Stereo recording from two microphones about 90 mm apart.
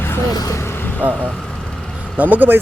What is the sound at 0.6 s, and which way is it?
Vehicle, 25° left (ahead or behind).